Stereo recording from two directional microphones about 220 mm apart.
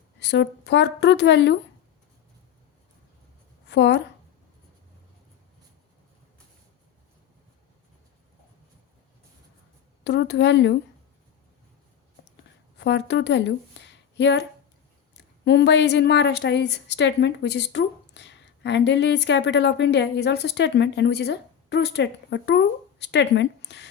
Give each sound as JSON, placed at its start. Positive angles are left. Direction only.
{"t": 0.2, "sound": "a woman's voice", "side_deg": 50}
{"t": 3.7, "sound": "speech", "side_deg": 55}
{"t": 10.0, "sound": "a woman's voice", "side_deg": 50}
{"t": 12.8, "sound": "a woman's voice", "side_deg": 55}